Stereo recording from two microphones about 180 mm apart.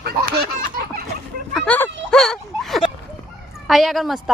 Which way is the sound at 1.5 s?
5° left (ahead or behind).